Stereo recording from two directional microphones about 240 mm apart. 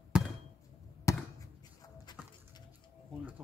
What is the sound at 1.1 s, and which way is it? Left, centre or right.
Basketball bounce, centre.